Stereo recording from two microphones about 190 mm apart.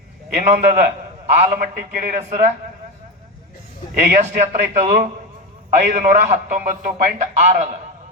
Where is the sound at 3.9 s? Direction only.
50° right (ahead or behind).